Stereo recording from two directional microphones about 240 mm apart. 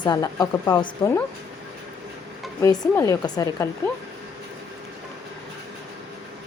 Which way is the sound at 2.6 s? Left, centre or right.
Centre.